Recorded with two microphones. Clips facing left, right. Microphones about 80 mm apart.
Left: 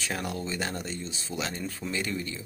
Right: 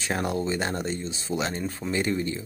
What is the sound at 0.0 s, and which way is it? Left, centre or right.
Speech, right.